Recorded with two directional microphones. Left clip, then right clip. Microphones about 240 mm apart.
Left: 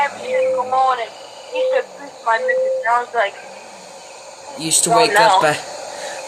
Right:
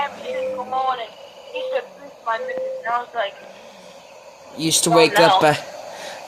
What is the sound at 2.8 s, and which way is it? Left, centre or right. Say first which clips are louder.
Speech: left 6 dB; centre.